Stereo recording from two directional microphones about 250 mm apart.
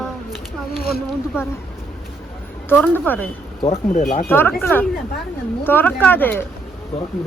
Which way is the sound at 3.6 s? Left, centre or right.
Left.